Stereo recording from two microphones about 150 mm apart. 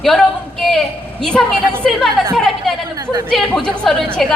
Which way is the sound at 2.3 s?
Centre (ahead or behind).